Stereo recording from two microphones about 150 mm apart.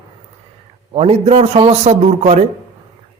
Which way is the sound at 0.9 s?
40° right (ahead or behind).